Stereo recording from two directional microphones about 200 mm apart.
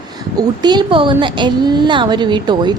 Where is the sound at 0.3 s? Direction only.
20° right (ahead or behind).